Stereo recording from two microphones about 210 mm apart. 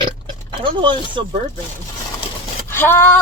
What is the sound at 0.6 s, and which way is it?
Speech, 20° right (ahead or behind).